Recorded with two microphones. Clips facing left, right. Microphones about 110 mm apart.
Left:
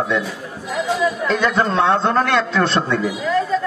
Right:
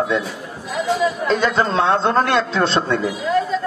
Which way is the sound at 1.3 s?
30° right (ahead or behind).